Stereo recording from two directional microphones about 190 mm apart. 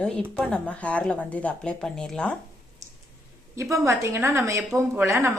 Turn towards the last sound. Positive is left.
turn(degrees=-15)  # may be behind; listen again after turning